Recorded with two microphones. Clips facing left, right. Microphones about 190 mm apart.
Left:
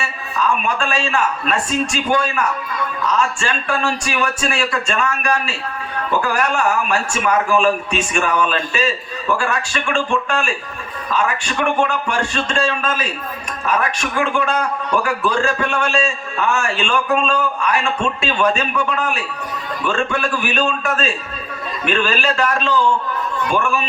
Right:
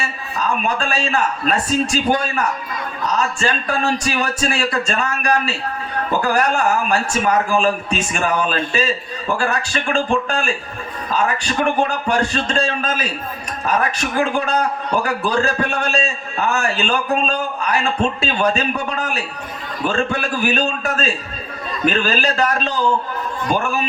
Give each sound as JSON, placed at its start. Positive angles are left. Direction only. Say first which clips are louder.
{"t": 0.3, "sound": "a man's voice", "louder": "left 1 dB", "side_deg": -35}